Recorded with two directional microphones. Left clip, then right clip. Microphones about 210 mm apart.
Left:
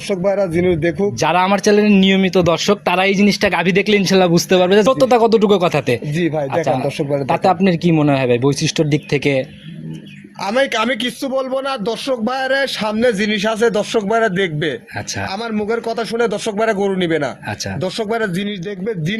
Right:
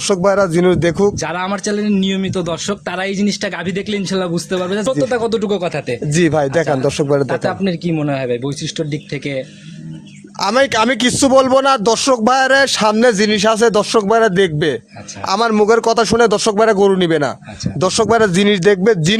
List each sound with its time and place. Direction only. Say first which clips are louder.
0.1 s a man's voice: right 3 dB; 50° right (ahead or behind)
1.2 s speech: left 6 dB; 15° left (ahead or behind)
6.1 s a man's voice: right 4 dB; 55° right (ahead or behind)
7.3 s speech: left 4 dB; 20° left (ahead or behind)
10.4 s a man's voice: right 3 dB; 45° right (ahead or behind)
15.3 s a man's voice: right 11 dB; 55° right (ahead or behind)
17.7 s speech: right 8 dB; 55° right (ahead or behind)